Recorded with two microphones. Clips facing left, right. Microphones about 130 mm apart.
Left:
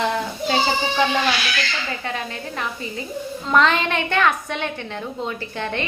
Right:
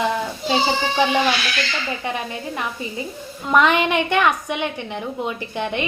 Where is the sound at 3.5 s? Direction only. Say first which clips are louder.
Right 2 dB; 15° right (ahead or behind).